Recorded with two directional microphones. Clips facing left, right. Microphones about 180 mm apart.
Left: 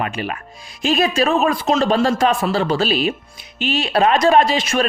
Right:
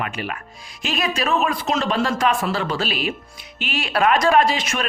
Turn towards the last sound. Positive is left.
turn(degrees=30)  # may be behind; listen again after turning